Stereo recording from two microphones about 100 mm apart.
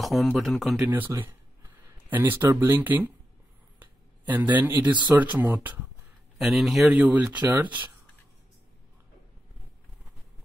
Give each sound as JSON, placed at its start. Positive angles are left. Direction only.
{"t": 0.0, "sound": "a man's voice", "side_deg": 0}
{"t": 0.7, "sound": "speech", "side_deg": -20}
{"t": 3.8, "sound": "a sound", "side_deg": -15}
{"t": 5.1, "sound": "speech", "side_deg": -20}
{"t": 6.3, "sound": "a man's voice", "side_deg": -5}